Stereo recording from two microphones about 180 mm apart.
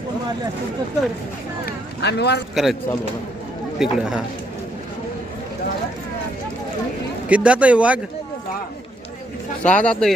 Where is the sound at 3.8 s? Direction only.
5° right (ahead or behind).